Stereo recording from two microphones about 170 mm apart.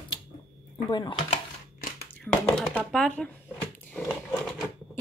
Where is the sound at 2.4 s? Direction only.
5° left (ahead or behind).